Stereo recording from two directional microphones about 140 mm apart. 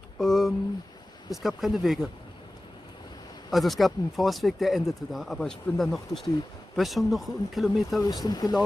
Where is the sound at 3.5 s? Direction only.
Centre (ahead or behind).